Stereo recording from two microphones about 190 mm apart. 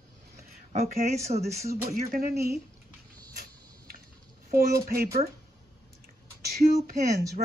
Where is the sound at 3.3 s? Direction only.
50° right (ahead or behind).